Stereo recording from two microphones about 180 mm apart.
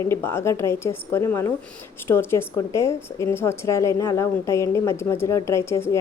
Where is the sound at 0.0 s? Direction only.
15° left (ahead or behind).